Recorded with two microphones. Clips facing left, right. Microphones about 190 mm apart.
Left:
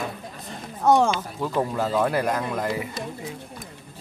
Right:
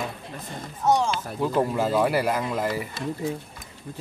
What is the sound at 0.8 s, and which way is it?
Speech, 55° left (ahead or behind).